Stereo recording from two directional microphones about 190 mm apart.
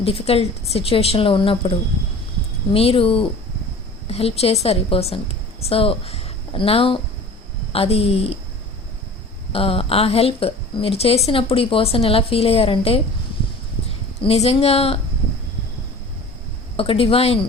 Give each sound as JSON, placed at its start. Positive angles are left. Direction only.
{"t": 0.0, "sound": "a woman's voice", "side_deg": 30}
{"t": 2.7, "sound": "a woman's voice", "side_deg": 30}
{"t": 9.5, "sound": "a woman's voice", "side_deg": 30}
{"t": 14.2, "sound": "a woman's voice", "side_deg": 30}
{"t": 16.7, "sound": "a woman's voice", "side_deg": 30}